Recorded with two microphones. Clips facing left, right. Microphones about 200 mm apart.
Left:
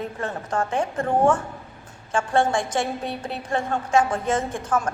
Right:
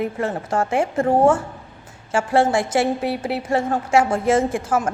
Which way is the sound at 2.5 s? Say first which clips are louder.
Right 5 dB; 10° right (ahead or behind).